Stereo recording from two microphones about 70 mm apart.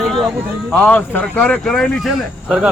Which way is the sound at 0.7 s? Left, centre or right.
Centre.